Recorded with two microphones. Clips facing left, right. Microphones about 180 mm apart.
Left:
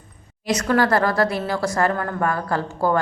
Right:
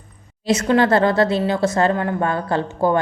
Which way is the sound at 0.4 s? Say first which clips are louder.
Right 3 dB; 25° right (ahead or behind).